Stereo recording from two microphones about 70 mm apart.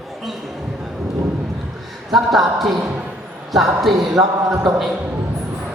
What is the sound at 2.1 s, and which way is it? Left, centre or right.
A woman's voice, centre.